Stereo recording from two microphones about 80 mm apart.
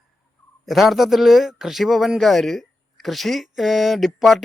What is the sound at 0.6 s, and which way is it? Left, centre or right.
Speech, centre.